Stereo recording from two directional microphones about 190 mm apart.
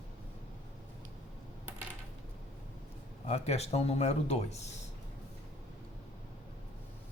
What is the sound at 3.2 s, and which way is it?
Speech, 35° left (ahead or behind).